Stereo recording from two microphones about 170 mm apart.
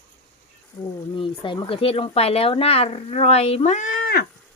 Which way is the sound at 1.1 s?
30° left (ahead or behind).